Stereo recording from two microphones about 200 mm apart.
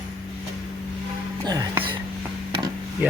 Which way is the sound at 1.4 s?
20° right (ahead or behind).